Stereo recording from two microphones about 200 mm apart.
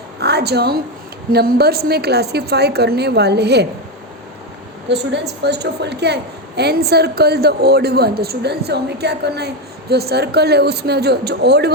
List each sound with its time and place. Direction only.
0.2 s a sound: 55° right (ahead or behind)
1.3 s a woman's voice: 50° right (ahead or behind)
4.9 s a woman's voice: 60° right (ahead or behind)